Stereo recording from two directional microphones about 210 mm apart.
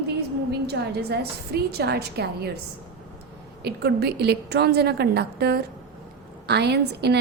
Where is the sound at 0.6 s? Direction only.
50° right (ahead or behind).